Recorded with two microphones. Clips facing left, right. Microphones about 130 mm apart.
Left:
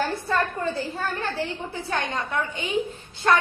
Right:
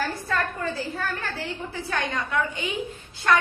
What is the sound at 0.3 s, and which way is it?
A woman's voice, 25° left (ahead or behind).